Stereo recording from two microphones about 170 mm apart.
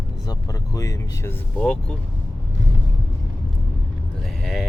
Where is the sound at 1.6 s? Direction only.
5° left (ahead or behind).